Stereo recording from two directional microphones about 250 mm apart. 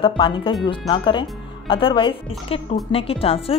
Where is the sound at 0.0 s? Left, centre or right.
Centre.